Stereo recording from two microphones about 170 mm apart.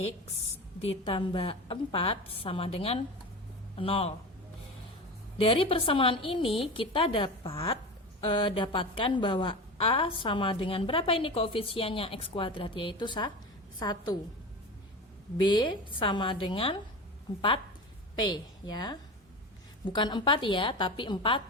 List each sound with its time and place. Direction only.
0.8 s a woman's voice: 35° left (ahead or behind)
5.4 s a woman's voice: 35° left (ahead or behind)
15.4 s a woman's voice: 25° left (ahead or behind)
18.2 s a woman's voice: 25° left (ahead or behind)